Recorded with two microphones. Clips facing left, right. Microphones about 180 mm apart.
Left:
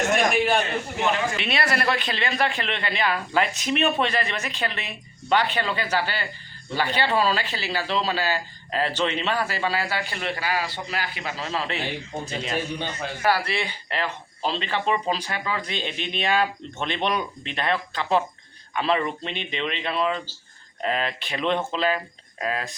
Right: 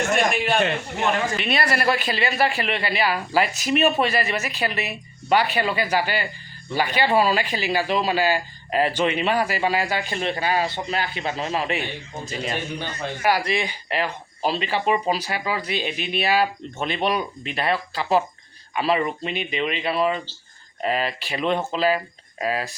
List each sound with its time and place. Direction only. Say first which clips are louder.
0.1 s a man's voice: left 2 dB; centre (ahead or behind); by 11.8 s 15° right (ahead or behind)
13.2 s speech: right 2 dB; 15° right (ahead or behind)